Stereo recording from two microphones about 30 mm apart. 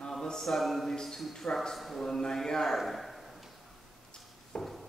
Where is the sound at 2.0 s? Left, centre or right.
Centre.